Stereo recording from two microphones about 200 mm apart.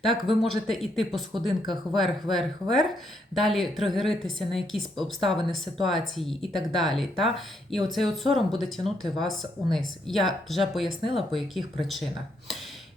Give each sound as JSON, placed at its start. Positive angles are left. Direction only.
{"t": 0.0, "sound": "speech", "side_deg": 0}